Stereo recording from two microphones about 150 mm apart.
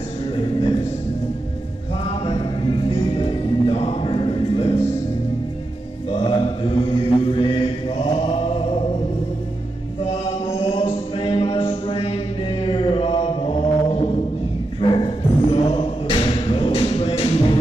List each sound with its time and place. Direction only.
0.4 s a sound: 35° left (ahead or behind)
2.0 s music: 40° left (ahead or behind)
6.1 s mantra: 40° left (ahead or behind)
10.0 s music: 45° left (ahead or behind)
12.6 s mantra: 35° left (ahead or behind)
14.8 s music: 35° left (ahead or behind)